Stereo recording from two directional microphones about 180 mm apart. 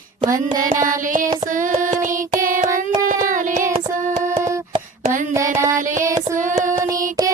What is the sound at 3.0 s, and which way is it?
Child singing, 45° right (ahead or behind).